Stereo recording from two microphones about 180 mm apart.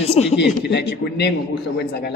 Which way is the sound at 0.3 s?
70° left (ahead or behind).